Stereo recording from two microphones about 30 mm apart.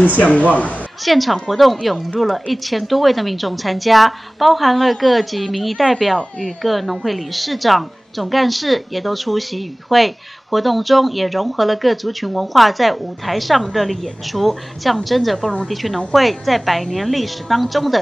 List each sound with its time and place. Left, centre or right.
0.2 s speech: left
1.0 s a woman's voice: centre